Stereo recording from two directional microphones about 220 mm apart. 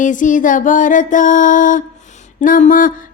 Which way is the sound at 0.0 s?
35° left (ahead or behind).